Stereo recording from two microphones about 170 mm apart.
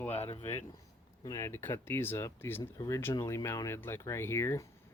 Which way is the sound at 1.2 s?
15° left (ahead or behind).